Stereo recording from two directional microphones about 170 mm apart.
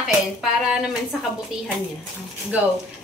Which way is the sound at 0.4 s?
Centre (ahead or behind).